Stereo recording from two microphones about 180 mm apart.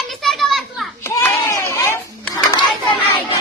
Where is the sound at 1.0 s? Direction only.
15° left (ahead or behind).